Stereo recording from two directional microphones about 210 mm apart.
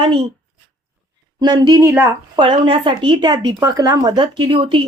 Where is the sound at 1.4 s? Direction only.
20° right (ahead or behind).